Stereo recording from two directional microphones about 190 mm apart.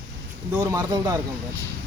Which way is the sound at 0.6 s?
20° right (ahead or behind).